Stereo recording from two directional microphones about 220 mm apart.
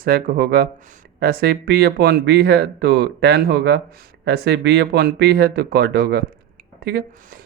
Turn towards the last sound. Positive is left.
turn(degrees=-45)  # may be behind; listen again after turning